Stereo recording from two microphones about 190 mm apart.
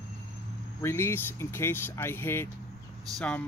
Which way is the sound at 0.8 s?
10° left (ahead or behind).